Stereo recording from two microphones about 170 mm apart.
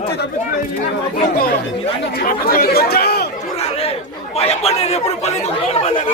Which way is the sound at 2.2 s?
60° left (ahead or behind).